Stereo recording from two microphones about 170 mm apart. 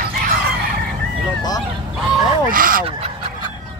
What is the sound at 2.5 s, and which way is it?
Speech, 55° right (ahead or behind).